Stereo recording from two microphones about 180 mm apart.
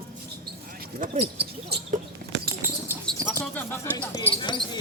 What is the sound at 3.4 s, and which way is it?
Speech, 10° left (ahead or behind).